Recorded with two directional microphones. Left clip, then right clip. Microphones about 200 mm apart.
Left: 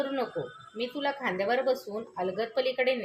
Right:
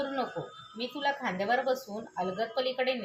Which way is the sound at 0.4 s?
35° left (ahead or behind).